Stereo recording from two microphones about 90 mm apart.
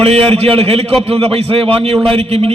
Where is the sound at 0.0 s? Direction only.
90° right.